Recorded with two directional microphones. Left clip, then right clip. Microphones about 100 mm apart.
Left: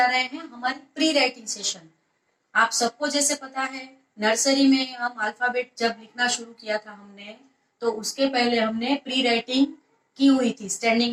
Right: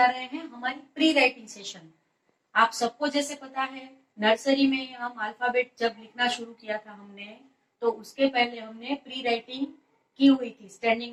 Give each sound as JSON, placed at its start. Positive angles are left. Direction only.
{"t": 0.0, "sound": "a woman's voice", "side_deg": 25}